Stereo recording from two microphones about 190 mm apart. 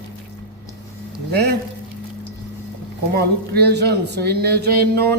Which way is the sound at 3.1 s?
55° right (ahead or behind).